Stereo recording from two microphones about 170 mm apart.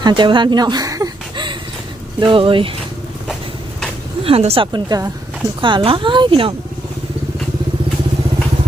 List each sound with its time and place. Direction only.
0.0 s a sound: 30° right (ahead or behind)
2.2 s a woman's voice: 30° right (ahead or behind)
4.2 s a woman's voice: 35° right (ahead or behind)